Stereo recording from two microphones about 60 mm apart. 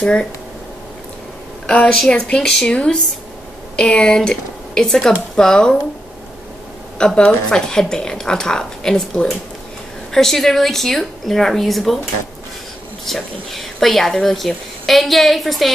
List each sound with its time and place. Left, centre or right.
0.0 s a woman's voice: centre
1.7 s a woman's voice: centre
7.2 s a woman's voice: centre
13.0 s a woman's voice: centre